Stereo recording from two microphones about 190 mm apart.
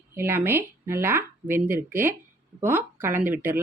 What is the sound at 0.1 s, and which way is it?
Speech, 10° right (ahead or behind).